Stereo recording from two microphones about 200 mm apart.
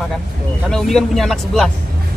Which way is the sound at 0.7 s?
Centre (ahead or behind).